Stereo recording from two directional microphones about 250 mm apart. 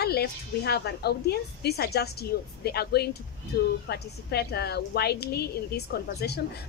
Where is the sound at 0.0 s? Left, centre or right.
Left.